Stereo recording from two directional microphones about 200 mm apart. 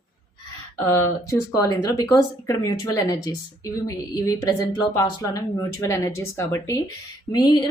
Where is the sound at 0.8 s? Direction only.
15° left (ahead or behind).